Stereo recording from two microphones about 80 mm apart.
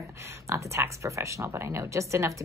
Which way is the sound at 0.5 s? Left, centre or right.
Right.